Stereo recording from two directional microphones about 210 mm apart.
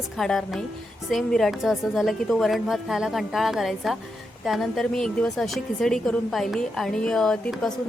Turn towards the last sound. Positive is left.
turn(degrees=0)  # may be behind; listen again after turning